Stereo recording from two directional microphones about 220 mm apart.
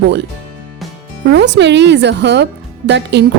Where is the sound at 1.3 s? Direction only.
50° right (ahead or behind).